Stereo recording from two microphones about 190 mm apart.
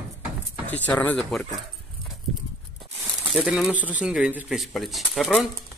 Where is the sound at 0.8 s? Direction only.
10° left (ahead or behind).